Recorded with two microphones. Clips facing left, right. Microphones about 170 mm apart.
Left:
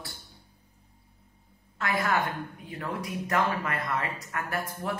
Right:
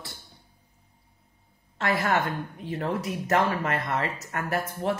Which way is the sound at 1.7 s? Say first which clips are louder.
Right 3 dB; 30° right (ahead or behind).